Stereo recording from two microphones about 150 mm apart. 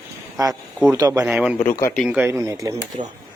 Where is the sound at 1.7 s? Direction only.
15° left (ahead or behind).